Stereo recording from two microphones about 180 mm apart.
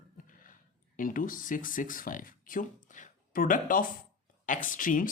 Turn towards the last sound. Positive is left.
turn(degrees=50)  # may be behind; listen again after turning